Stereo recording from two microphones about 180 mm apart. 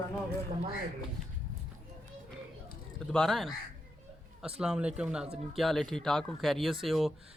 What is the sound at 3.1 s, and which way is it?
Speech, centre (ahead or behind).